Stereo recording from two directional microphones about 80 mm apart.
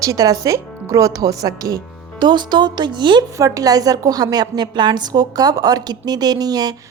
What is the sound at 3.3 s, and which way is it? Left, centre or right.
A woman's voice, right.